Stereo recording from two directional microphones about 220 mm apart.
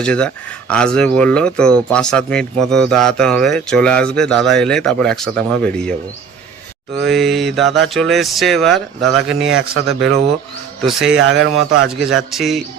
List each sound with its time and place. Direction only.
0.0 s speech: 5° left (ahead or behind)
7.0 s speech: centre (ahead or behind)
11.2 s speech: 60° right (ahead or behind)
11.9 s speech: centre (ahead or behind)